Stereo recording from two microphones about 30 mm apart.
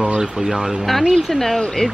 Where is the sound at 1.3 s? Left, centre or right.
Centre.